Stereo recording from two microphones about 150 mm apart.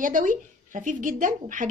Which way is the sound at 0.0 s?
60° right (ahead or behind).